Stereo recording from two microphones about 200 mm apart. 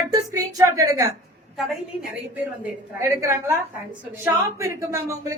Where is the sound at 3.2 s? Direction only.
15° right (ahead or behind).